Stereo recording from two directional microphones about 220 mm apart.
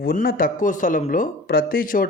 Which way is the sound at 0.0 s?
45° left (ahead or behind).